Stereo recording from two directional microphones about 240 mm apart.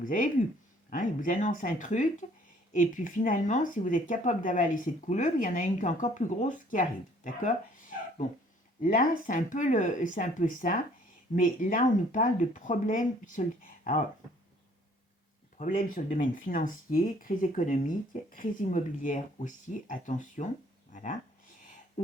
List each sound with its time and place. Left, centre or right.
0.0 s speech: left
15.5 s speech: left
20.9 s a sound: left